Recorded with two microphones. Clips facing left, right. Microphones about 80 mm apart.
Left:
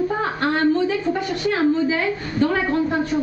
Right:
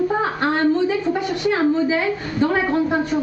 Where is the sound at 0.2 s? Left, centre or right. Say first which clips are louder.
Right 1 dB; right.